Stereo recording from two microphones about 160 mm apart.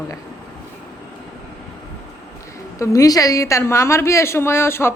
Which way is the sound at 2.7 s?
20° left (ahead or behind).